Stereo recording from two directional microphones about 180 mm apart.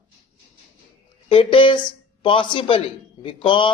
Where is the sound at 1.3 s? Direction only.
30° left (ahead or behind).